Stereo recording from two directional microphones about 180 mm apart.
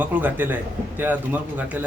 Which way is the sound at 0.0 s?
10° right (ahead or behind).